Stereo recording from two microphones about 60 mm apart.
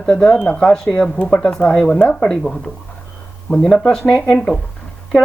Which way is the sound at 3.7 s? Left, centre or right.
Centre.